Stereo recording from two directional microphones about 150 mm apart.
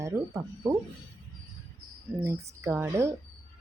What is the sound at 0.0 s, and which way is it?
Speech, 20° right (ahead or behind).